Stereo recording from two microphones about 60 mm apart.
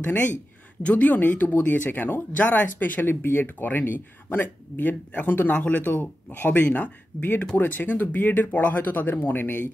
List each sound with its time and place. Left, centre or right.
0.0 s speech: left